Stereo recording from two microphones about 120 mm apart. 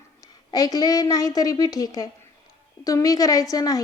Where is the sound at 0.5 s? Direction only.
30° left (ahead or behind).